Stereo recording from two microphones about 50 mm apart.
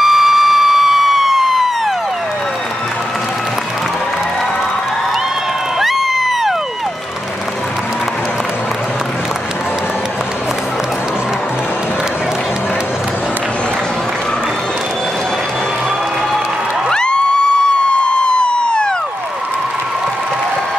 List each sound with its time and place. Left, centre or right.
0.0 s emergency vehicle: centre
5.8 s crowd: centre
16.9 s a sound: centre